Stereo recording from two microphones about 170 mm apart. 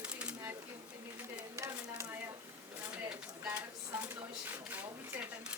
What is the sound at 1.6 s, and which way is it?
Speech, 15° right (ahead or behind).